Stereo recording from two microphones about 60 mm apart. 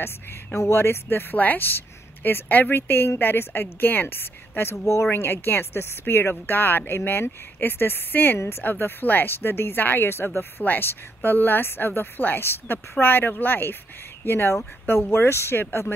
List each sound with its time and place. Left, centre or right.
0.6 s speech: left
1.0 s speech: left
4.7 s speech: left
5.1 s speech: left